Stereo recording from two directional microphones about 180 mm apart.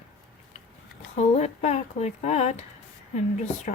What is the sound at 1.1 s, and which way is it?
Speech, 40° left (ahead or behind).